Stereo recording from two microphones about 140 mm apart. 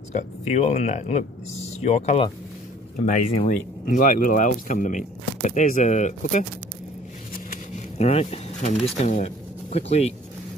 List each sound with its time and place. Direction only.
0.1 s speech: 50° left (ahead or behind)
3.4 s speech: 65° left (ahead or behind)
7.3 s a sound: 55° left (ahead or behind)
9.0 s speech: 55° left (ahead or behind)